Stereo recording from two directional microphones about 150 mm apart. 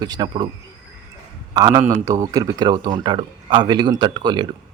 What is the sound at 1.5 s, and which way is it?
A man's voice, 25° right (ahead or behind).